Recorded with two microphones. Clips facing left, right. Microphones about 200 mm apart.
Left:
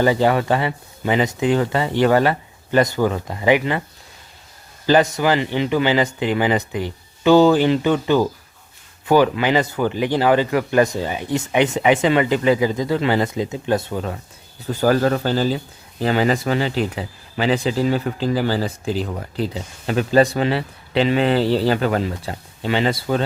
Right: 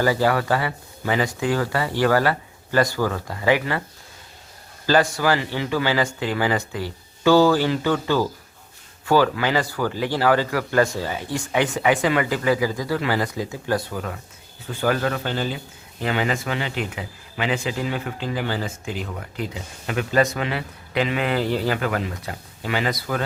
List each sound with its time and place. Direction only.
0.0 s speech: 20° left (ahead or behind)
4.9 s speech: 20° left (ahead or behind)
14.7 s a man's voice: 40° left (ahead or behind)